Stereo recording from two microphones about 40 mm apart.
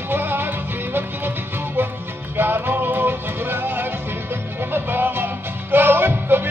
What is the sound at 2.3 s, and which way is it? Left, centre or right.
Music, right.